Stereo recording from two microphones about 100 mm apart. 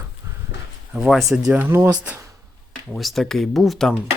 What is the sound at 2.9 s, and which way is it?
Speech, centre (ahead or behind).